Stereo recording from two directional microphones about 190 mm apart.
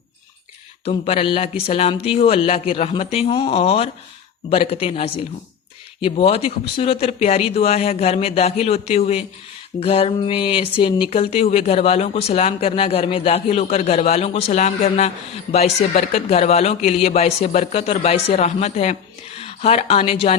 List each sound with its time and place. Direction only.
0.9 s speech: 30° left (ahead or behind)